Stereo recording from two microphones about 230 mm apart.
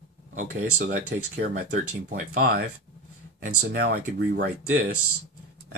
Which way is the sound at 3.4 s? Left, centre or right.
Right.